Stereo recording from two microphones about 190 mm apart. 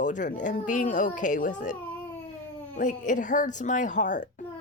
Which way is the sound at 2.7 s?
40° left (ahead or behind).